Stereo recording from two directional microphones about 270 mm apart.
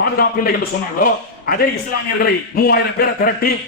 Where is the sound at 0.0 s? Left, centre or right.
Left.